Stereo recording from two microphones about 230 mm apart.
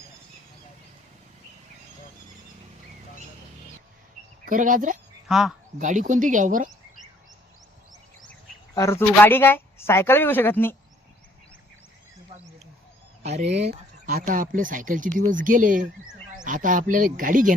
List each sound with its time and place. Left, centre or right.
4.4 s speech: right
5.3 s a man's voice: centre
5.8 s speech: right
8.3 s speech: centre
13.2 s speech: right
14.1 s speech: right